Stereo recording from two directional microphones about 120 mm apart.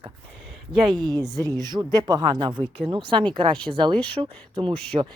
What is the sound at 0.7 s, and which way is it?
Speech, 40° right (ahead or behind).